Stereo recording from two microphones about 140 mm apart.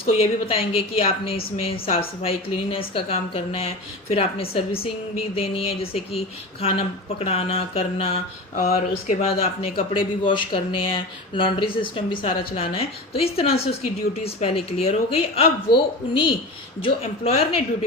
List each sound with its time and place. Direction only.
0.1 s a woman's voice: 45° left (ahead or behind)
8.5 s speech: 80° left
9.9 s a woman's voice: 35° left (ahead or behind)